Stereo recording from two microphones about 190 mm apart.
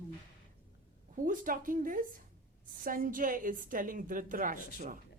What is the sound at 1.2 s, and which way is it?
Speech, 45° right (ahead or behind).